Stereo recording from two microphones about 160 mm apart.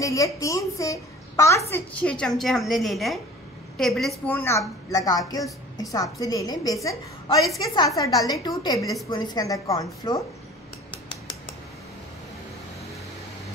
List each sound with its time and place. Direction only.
0.0 s a woman's voice: 20° left (ahead or behind)
1.7 s a woman's voice: 10° left (ahead or behind)
4.3 s a woman's voice: 15° left (ahead or behind)